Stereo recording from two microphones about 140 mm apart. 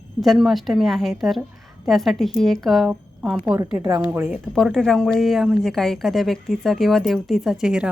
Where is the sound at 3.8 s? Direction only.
20° right (ahead or behind).